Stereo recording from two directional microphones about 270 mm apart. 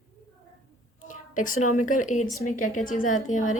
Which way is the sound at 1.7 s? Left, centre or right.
Left.